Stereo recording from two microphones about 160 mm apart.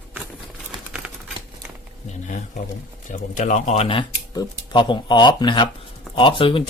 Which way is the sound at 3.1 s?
50° left (ahead or behind).